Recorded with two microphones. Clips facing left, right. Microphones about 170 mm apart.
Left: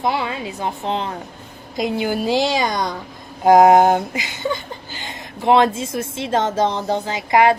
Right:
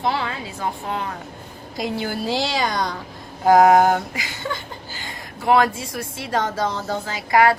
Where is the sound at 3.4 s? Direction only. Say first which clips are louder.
Left 3 dB; 20° left (ahead or behind).